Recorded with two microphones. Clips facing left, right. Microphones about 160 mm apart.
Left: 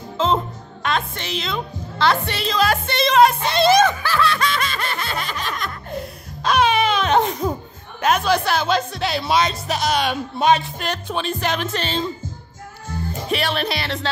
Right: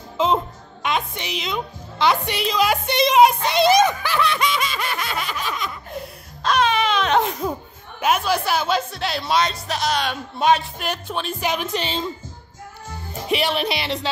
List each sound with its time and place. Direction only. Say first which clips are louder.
0.2 s music: even; 15° right (ahead or behind)
6.4 s music: left 2 dB; 5° left (ahead or behind)
8.0 s speech: left 2 dB; 5° right (ahead or behind)
13.3 s speech: right 2 dB; 15° right (ahead or behind)